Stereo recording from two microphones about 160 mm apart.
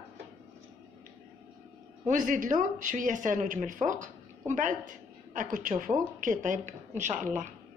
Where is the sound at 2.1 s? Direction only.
55° right (ahead or behind).